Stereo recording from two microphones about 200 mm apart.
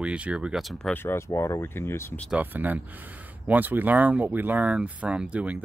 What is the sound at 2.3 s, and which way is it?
Speech, 10° right (ahead or behind).